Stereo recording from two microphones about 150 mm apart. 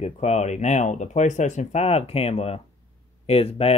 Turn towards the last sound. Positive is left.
turn(degrees=40)  # may be behind; listen again after turning